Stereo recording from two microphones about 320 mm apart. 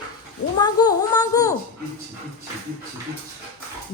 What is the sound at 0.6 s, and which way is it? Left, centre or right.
Speech, centre.